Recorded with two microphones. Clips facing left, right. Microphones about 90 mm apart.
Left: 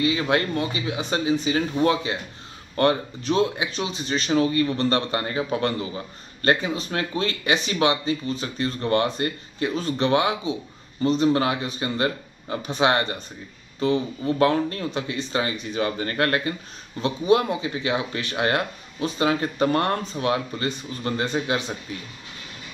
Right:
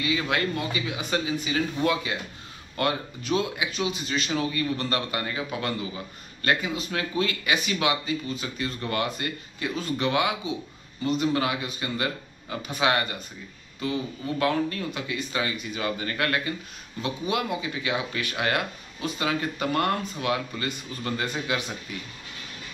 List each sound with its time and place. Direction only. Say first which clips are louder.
0.0 s speech: left 4 dB; 35° left (ahead or behind)